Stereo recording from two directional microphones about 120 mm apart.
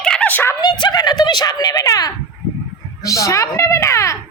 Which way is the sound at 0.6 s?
35° left (ahead or behind).